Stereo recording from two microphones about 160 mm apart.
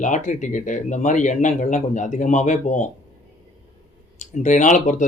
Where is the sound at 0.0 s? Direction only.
50° left (ahead or behind).